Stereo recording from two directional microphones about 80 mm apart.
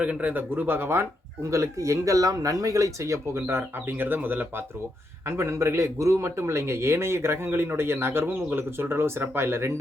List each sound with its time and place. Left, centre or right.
0.0 s speech: centre
1.5 s a man's voice: right
5.2 s a man's voice: right